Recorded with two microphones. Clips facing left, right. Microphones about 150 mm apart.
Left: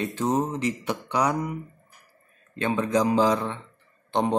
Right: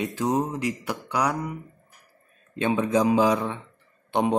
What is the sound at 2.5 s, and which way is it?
Speech, 15° right (ahead or behind).